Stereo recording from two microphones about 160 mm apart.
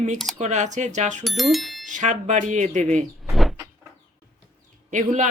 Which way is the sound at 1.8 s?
50° right (ahead or behind).